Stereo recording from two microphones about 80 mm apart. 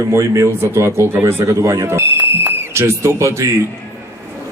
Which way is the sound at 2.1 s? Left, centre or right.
Right.